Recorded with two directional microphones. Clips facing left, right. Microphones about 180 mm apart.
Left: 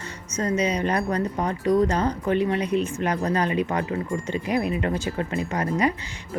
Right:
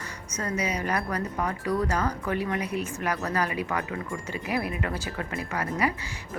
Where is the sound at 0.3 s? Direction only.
25° left (ahead or behind).